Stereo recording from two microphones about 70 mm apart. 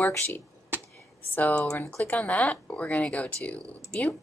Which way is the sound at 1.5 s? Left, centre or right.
Centre.